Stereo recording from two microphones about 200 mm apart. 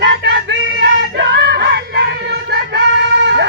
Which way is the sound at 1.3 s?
60° right (ahead or behind).